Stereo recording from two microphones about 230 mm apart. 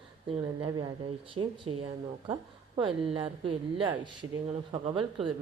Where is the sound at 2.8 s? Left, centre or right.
Right.